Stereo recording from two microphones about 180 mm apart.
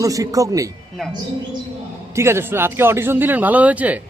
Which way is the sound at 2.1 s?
15° right (ahead or behind).